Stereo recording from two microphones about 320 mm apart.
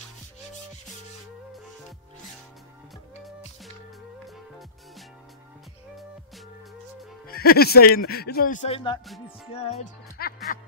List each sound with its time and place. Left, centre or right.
7.2 s speech: left
9.0 s music: centre
9.5 s music: centre